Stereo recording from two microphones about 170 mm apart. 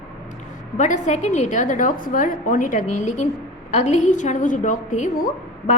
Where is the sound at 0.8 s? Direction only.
45° left (ahead or behind).